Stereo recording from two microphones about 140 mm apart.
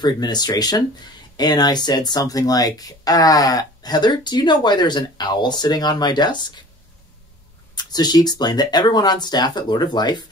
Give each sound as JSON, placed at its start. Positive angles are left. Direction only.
{"t": 0.0, "sound": "speech", "side_deg": 30}
{"t": 7.7, "sound": "speech", "side_deg": 30}